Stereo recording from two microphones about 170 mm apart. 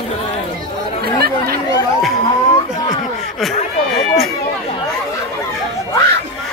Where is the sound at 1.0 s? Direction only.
65° right (ahead or behind).